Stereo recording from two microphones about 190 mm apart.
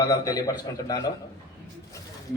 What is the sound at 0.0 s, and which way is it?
A man's voice, 20° left (ahead or behind).